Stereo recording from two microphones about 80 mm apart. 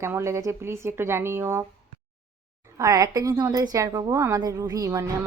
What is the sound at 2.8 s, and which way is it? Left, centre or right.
Speech, right.